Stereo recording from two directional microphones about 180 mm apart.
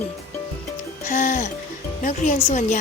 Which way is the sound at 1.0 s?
45° left (ahead or behind).